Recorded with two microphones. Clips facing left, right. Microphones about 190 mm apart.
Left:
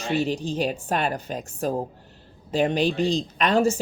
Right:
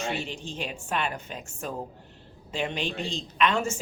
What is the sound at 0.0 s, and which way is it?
Speech, 35° left (ahead or behind).